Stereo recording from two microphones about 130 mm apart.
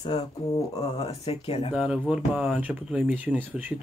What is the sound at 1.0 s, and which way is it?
Speech, 50° left (ahead or behind).